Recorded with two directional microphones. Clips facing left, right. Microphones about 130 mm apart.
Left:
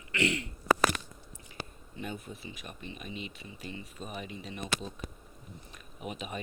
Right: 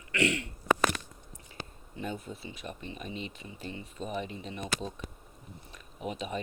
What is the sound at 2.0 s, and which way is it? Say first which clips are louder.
Speech: right 2 dB; 30° right (ahead or behind).